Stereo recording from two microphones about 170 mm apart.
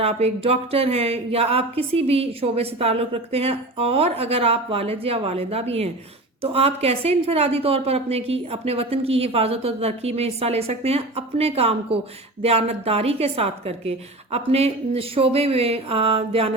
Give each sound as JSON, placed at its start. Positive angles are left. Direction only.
{"t": 0.0, "sound": "speech", "side_deg": -35}